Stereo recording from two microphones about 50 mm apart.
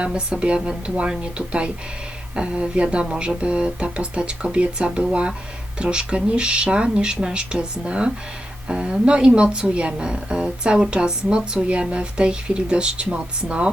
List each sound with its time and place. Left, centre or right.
0.0 s a woman's voice: right